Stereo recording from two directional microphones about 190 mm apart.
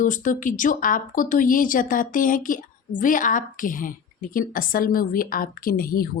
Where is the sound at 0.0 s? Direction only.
40° left (ahead or behind).